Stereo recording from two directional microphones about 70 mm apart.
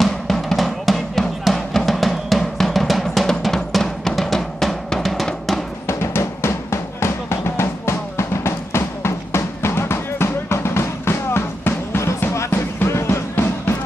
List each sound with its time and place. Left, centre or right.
0.0 s drum: centre
5.9 s drum: left
12.4 s music: left
12.8 s music: left